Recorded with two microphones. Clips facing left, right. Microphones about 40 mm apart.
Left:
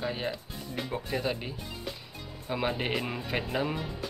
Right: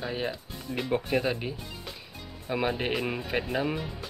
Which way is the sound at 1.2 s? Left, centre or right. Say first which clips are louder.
Right 2 dB; centre.